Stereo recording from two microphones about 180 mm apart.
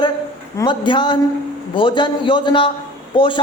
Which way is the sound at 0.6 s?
25° left (ahead or behind).